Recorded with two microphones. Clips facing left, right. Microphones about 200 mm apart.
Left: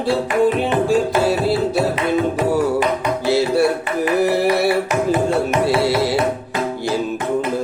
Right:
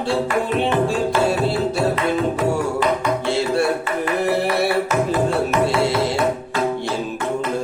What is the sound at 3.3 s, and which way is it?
Music, centre (ahead or behind).